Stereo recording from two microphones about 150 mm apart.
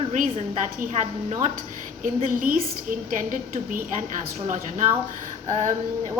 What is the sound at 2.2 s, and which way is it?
A woman's voice, 65° right (ahead or behind).